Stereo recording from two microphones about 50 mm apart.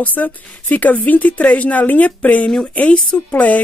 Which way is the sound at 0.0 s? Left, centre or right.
Left.